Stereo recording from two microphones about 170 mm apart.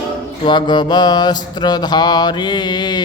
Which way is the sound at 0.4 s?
25° left (ahead or behind).